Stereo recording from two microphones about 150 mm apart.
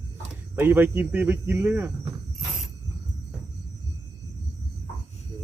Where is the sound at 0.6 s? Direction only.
15° right (ahead or behind).